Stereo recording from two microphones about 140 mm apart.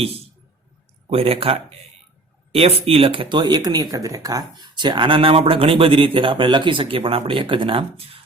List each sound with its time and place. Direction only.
1.1 s speech: 45° right (ahead or behind)